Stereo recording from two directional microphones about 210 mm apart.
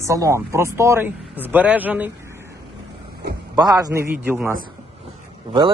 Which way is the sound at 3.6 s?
15° right (ahead or behind).